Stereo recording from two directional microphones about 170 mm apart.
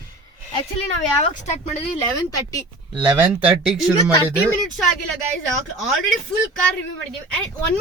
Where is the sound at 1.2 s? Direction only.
40° left (ahead or behind).